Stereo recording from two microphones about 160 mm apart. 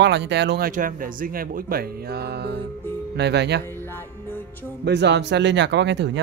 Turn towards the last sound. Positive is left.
turn(degrees=-90)